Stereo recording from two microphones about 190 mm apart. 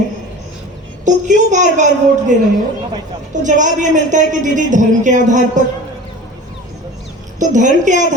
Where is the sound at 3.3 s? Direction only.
40° right (ahead or behind).